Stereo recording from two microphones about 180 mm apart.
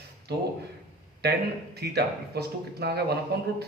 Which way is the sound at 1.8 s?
65° right (ahead or behind).